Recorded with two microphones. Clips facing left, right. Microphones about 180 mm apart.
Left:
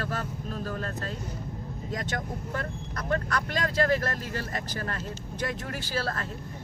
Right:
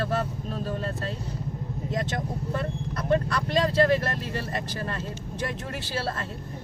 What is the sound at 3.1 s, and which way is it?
Speech, 25° right (ahead or behind).